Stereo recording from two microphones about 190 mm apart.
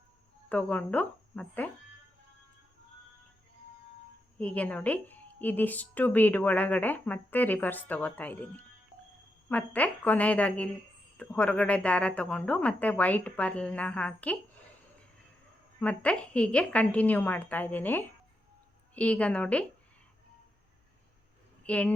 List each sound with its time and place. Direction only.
0.4 s a woman's voice: 5° left (ahead or behind)
4.4 s a woman's voice: 5° left (ahead or behind)
15.8 s a woman's voice: 5° left (ahead or behind)
21.6 s speech: 5° left (ahead or behind)